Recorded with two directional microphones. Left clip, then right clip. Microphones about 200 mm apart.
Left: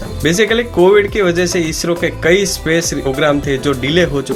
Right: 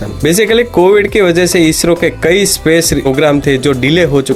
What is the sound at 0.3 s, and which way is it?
Speech, 45° right (ahead or behind).